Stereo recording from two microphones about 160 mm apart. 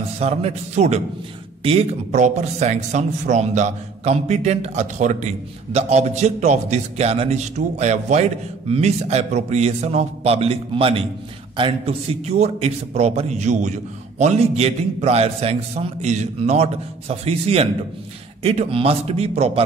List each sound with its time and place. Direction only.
0.2 s a man's voice: 40° right (ahead or behind)
2.0 s a man's voice: 50° right (ahead or behind)